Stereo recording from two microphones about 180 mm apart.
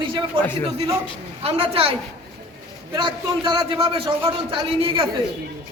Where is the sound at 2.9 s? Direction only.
25° right (ahead or behind).